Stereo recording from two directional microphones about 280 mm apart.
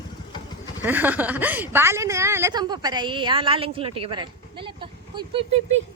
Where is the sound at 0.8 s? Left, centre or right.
Centre.